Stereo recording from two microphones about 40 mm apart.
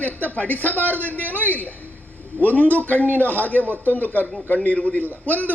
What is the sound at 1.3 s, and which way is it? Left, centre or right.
A man's voice, left.